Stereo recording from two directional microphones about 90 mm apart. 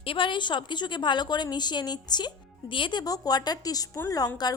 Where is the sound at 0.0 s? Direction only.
75° left (ahead or behind).